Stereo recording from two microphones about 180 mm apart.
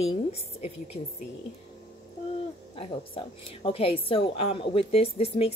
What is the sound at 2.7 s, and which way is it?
Speech, 30° left (ahead or behind).